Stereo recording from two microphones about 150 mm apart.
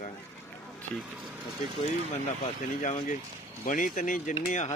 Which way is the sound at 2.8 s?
60° left (ahead or behind).